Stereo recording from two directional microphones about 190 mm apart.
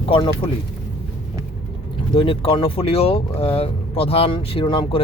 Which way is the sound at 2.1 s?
25° left (ahead or behind).